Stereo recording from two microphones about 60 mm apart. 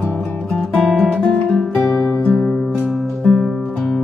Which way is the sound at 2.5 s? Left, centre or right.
Centre.